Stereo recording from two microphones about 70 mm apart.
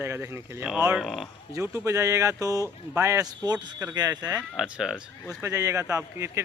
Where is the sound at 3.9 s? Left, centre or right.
Right.